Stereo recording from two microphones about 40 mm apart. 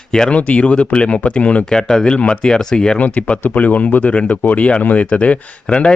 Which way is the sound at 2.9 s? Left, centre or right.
Left.